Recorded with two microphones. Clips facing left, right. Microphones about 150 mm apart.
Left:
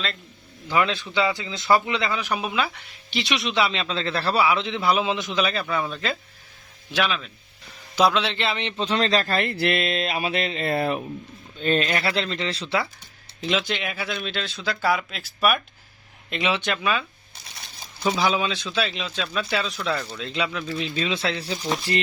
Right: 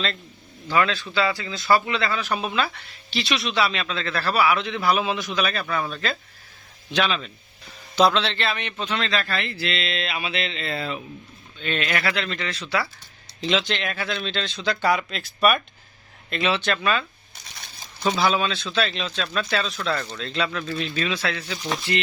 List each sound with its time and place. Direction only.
0.7 s a man's voice: 20° left (ahead or behind)
6.9 s speech: 5° left (ahead or behind); by 8.7 s 25° left (ahead or behind)
8.8 s speech: 35° left (ahead or behind); by 11.0 s 55° left (ahead or behind)
11.6 s speech: 35° left (ahead or behind)
13.4 s speech: 5° left (ahead or behind)
16.3 s speech: 15° left (ahead or behind)